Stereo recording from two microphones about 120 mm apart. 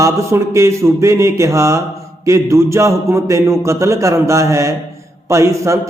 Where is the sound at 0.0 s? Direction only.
25° right (ahead or behind).